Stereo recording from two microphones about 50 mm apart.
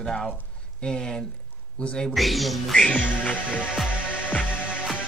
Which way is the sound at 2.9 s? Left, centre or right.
Left.